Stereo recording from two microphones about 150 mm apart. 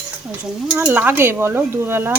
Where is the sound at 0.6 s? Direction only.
10° right (ahead or behind).